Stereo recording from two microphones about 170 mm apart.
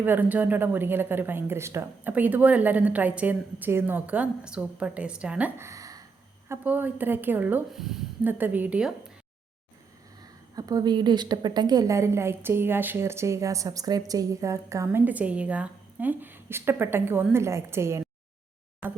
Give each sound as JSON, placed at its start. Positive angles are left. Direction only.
{"t": 0.0, "sound": "a woman's voice", "side_deg": -10}
{"t": 10.5, "sound": "a woman's voice", "side_deg": -20}